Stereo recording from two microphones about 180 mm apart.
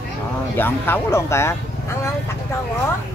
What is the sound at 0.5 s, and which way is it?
Speech, 10° left (ahead or behind).